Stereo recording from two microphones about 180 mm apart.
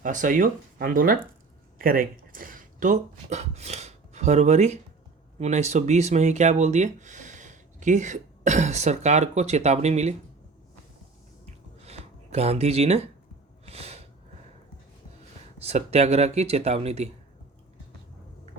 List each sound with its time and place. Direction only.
0.0 s speech: 45° right (ahead or behind)
11.9 s a sound: 35° right (ahead or behind)
13.7 s snort: 35° right (ahead or behind)
15.5 s speech: 35° right (ahead or behind)